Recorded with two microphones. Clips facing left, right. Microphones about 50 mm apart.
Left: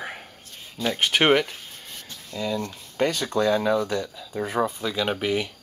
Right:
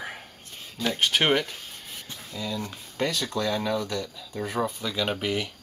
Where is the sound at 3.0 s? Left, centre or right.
Left.